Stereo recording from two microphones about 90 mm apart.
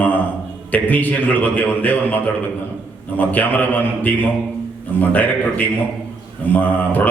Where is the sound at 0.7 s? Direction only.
20° left (ahead or behind).